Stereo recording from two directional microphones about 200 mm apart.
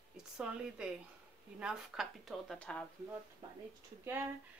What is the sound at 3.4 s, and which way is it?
Speech, 20° right (ahead or behind).